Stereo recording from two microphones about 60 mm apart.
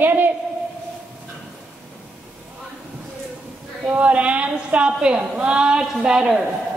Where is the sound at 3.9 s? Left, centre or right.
Right.